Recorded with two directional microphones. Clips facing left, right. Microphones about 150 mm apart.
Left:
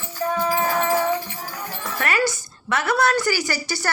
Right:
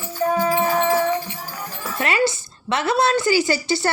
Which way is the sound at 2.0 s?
25° right (ahead or behind).